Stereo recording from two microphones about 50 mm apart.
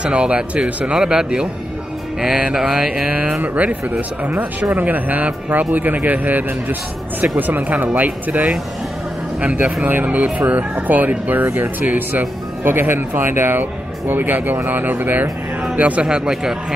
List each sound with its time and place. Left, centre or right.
0.0 s speech: right
0.9 s mantra: centre
4.2 s speech: right
16.1 s mantra: centre